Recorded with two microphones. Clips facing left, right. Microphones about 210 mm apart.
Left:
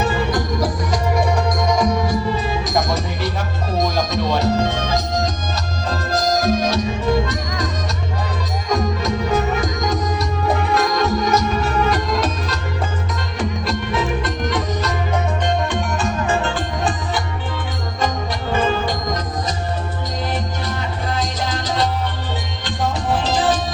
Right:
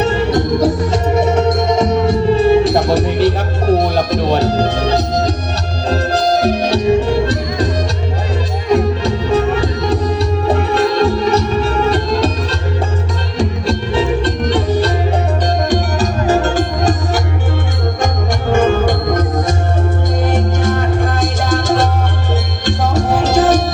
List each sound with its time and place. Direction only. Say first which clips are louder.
0.0 s music: right 6 dB; 25° right (ahead or behind)
8.7 s music: right 6 dB; 30° right (ahead or behind)
18.5 s music: right 7 dB; 50° right (ahead or behind)